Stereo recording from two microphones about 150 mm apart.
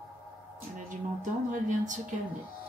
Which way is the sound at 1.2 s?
55° right (ahead or behind).